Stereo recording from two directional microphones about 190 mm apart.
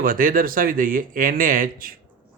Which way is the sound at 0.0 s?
50° right (ahead or behind).